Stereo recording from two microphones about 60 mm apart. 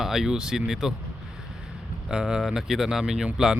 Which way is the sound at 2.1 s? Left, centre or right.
Centre.